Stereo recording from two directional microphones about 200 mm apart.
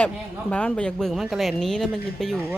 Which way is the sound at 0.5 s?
5° left (ahead or behind).